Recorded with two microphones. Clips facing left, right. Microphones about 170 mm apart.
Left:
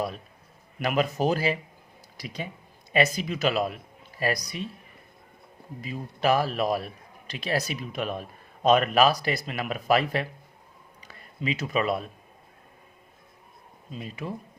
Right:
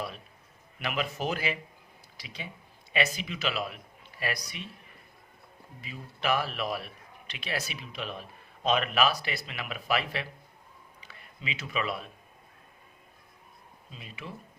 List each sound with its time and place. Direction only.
0.8 s a man's voice: 40° left (ahead or behind)
5.8 s a man's voice: 40° left (ahead or behind)
13.9 s speech: 45° left (ahead or behind)